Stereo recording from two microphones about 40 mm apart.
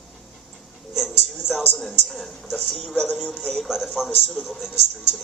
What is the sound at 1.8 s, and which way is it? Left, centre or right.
Speech, centre.